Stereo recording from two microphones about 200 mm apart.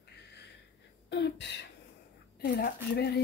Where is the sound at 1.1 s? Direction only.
60° left (ahead or behind).